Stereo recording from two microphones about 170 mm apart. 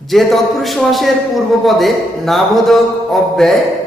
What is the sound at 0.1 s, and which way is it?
A man's voice, centre (ahead or behind).